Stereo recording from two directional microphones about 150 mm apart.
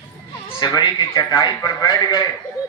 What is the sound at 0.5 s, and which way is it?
Speech, 30° left (ahead or behind).